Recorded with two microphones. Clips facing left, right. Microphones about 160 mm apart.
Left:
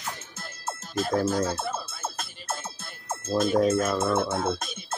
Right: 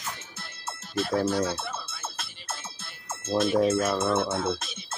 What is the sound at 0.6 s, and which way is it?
Music, 45° left (ahead or behind).